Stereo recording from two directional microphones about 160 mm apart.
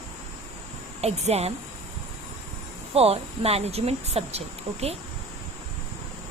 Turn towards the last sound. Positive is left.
turn(degrees=-40)  # may be behind; listen again after turning